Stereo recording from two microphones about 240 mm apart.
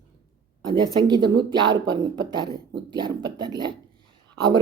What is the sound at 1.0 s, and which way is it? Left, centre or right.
A woman's voice, centre.